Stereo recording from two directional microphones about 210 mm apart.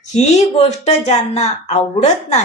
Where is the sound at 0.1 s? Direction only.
35° left (ahead or behind).